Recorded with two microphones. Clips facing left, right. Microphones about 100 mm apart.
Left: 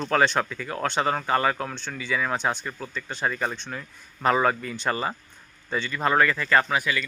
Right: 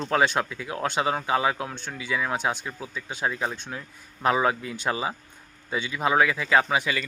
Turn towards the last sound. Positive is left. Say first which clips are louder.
# even
turn(degrees=-25)  # may be behind; listen again after turning